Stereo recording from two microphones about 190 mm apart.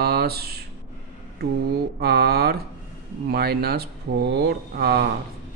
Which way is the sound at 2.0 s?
55° right (ahead or behind).